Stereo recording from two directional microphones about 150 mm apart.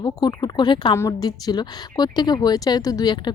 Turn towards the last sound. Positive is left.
turn(degrees=25)  # may be behind; listen again after turning